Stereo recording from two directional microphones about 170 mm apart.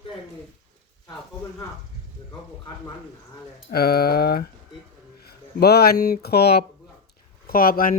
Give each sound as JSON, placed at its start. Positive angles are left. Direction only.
{"t": 3.7, "sound": "a sound", "side_deg": 65}
{"t": 5.5, "sound": "speech", "side_deg": 65}
{"t": 7.4, "sound": "speech", "side_deg": 60}